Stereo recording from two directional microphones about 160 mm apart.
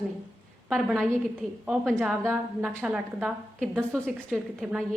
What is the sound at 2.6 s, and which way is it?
A woman's voice, centre (ahead or behind).